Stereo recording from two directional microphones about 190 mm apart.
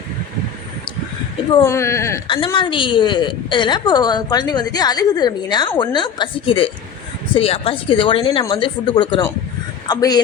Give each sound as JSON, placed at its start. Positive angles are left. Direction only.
{"t": 1.6, "sound": "speech", "side_deg": 15}
{"t": 2.2, "sound": "a woman's voice", "side_deg": 25}